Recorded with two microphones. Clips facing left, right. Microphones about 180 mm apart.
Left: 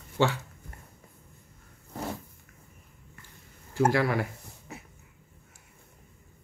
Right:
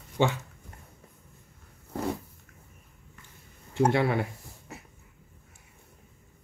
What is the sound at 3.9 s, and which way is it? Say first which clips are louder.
Speech: right 1 dB; 25° right (ahead or behind).